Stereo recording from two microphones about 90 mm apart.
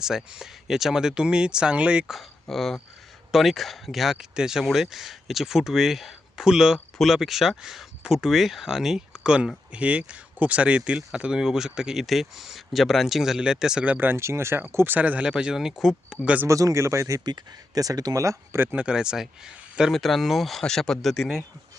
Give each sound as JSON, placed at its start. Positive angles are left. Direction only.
{"t": 0.0, "sound": "speech", "side_deg": -5}
{"t": 2.1, "sound": "speech", "side_deg": 0}
{"t": 16.5, "sound": "speech", "side_deg": -35}
{"t": 17.2, "sound": "speech", "side_deg": -45}
{"t": 18.8, "sound": "speech", "side_deg": -10}